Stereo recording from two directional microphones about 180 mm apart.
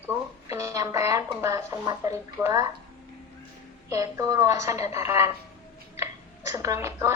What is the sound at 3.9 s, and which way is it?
A woman's voice, 15° right (ahead or behind).